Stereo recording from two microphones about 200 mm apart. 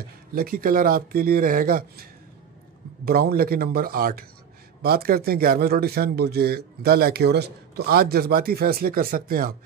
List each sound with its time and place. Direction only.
0.3 s a man's voice: 45° right (ahead or behind)
3.1 s a man's voice: 50° right (ahead or behind)